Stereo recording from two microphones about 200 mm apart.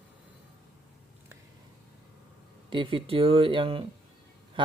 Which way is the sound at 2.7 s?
25° right (ahead or behind).